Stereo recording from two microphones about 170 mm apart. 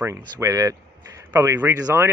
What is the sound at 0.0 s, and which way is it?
A man's voice, 15° right (ahead or behind).